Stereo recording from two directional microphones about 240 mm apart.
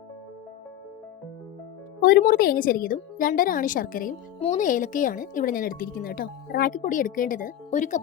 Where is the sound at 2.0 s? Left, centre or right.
Left.